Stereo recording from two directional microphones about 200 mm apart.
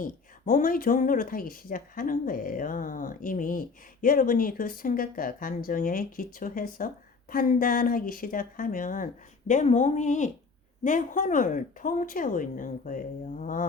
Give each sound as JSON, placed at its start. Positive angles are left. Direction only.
{"t": 0.0, "sound": "speech", "side_deg": 40}